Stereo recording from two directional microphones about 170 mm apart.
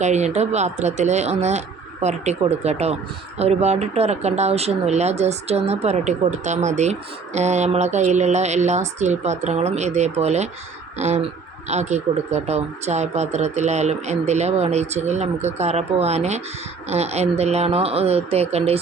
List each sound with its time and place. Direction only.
0.0 s speech: 40° right (ahead or behind)